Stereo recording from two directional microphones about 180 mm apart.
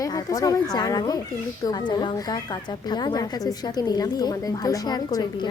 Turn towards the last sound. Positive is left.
turn(degrees=20)  # may be behind; listen again after turning